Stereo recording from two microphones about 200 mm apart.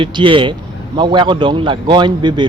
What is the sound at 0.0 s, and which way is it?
A man's voice, 25° right (ahead or behind).